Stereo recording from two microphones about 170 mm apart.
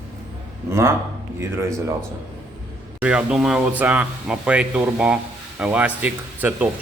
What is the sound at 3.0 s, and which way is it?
Speech, 5° right (ahead or behind).